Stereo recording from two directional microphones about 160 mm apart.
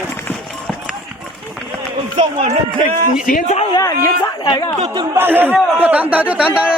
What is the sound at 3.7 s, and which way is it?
Speech, 20° left (ahead or behind).